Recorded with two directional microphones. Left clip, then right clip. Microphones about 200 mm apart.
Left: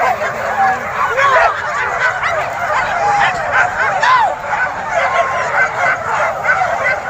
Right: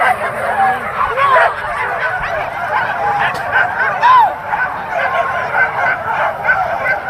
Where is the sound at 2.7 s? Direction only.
5° right (ahead or behind).